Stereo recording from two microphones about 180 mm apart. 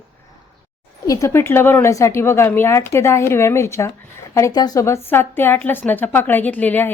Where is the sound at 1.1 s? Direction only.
15° left (ahead or behind).